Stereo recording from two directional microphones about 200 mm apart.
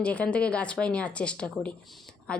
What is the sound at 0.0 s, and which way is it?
A woman's voice, 5° left (ahead or behind).